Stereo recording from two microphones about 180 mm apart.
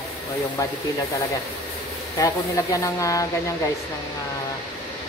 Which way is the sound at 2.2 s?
20° left (ahead or behind).